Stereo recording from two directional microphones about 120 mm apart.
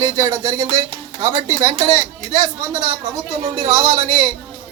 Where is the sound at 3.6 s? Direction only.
25° right (ahead or behind).